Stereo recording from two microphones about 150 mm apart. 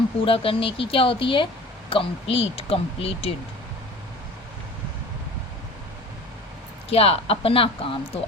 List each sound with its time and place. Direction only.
0.3 s speech: 40° left (ahead or behind)
6.9 s speech: 40° left (ahead or behind)